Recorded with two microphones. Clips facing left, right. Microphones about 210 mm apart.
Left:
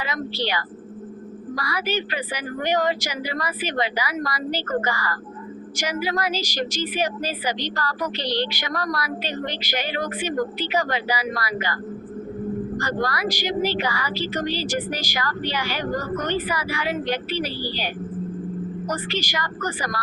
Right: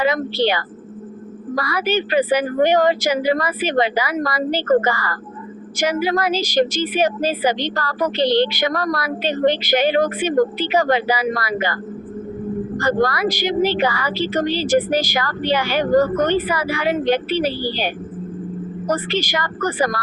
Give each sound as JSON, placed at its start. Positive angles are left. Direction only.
{"t": 0.0, "sound": "a woman's voice", "side_deg": -55}
{"t": 8.1, "sound": "speech", "side_deg": -25}
{"t": 8.5, "sound": "a woman's voice", "side_deg": -55}
{"t": 12.8, "sound": "a woman's voice", "side_deg": -55}
{"t": 14.4, "sound": "speech", "side_deg": -25}
{"t": 14.7, "sound": "a woman's voice", "side_deg": -55}
{"t": 18.9, "sound": "a woman's voice", "side_deg": -55}